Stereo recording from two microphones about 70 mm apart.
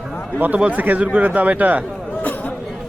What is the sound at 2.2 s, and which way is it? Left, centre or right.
Chatter, left.